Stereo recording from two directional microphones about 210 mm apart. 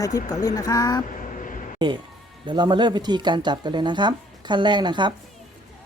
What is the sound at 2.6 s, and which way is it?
Speech, 20° right (ahead or behind).